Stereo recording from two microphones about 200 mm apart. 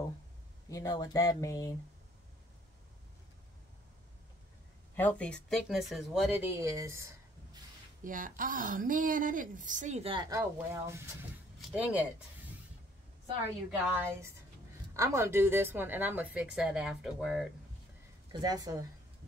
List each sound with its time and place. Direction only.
0.7 s speech: 15° left (ahead or behind)
4.9 s speech: 10° left (ahead or behind); by 7.1 s 15° right (ahead or behind)
8.0 s speech: 40° right (ahead or behind); by 12.0 s 5° right (ahead or behind)
13.7 s a woman's voice: 10° right (ahead or behind)
18.4 s a woman's voice: 20° right (ahead or behind)